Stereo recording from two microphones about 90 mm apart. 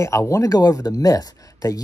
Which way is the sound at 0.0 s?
35° left (ahead or behind).